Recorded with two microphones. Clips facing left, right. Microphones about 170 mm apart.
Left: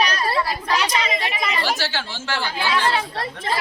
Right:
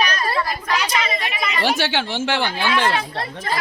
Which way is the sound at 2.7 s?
30° left (ahead or behind).